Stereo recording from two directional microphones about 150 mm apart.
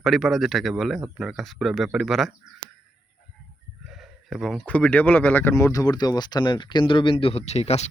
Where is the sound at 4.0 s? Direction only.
Centre (ahead or behind).